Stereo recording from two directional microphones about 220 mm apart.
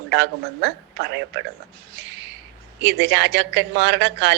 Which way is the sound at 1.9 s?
50° right (ahead or behind).